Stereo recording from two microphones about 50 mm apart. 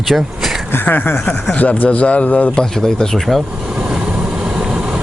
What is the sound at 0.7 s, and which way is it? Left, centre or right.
A man's voice, left.